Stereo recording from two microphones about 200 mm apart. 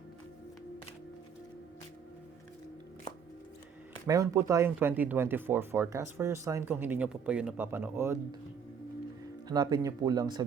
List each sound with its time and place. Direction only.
4.0 s speech: 15° right (ahead or behind)
9.5 s speech: 20° right (ahead or behind)